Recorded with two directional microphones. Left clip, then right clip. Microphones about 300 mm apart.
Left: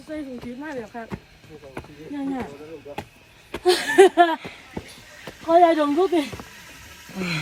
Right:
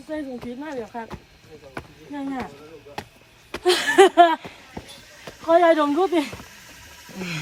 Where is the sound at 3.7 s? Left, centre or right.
Centre.